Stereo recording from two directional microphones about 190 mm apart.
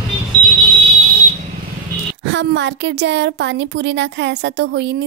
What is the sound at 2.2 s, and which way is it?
A woman's voice, 70° right (ahead or behind).